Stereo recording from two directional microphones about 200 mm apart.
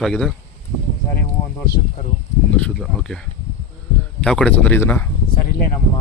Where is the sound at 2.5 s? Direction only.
5° left (ahead or behind).